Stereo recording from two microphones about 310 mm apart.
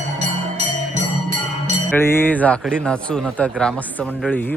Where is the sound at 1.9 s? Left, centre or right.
Centre.